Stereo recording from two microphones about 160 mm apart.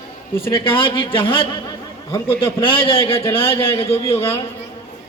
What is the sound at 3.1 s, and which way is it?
Speech, 15° left (ahead or behind).